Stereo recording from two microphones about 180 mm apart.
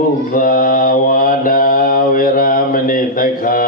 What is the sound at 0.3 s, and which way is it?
Mantra, 50° left (ahead or behind).